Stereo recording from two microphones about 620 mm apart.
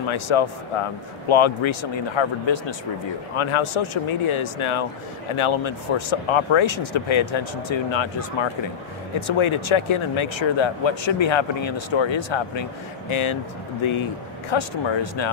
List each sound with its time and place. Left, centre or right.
0.1 s speech: left